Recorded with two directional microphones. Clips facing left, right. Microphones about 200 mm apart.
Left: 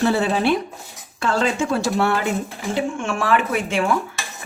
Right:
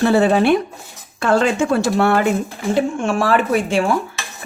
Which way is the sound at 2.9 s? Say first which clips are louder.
Right 4 dB; 35° right (ahead or behind).